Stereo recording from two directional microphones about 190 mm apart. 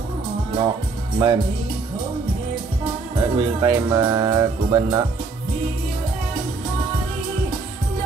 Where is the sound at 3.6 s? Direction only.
20° right (ahead or behind).